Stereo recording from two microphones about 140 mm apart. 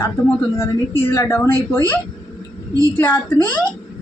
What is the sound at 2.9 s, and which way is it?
Speech, 15° left (ahead or behind).